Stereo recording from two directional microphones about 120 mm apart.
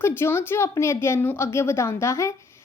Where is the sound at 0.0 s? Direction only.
20° left (ahead or behind).